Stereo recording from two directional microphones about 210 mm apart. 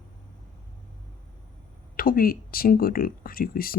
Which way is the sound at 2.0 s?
45° left (ahead or behind).